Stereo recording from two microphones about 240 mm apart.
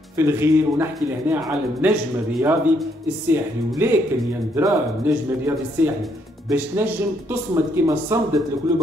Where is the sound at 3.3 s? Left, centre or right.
Centre.